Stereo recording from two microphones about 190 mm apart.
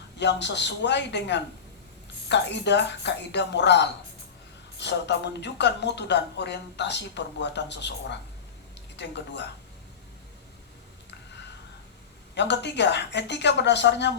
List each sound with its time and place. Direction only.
0.2 s speech: 65° left (ahead or behind)
12.3 s speech: 65° left (ahead or behind)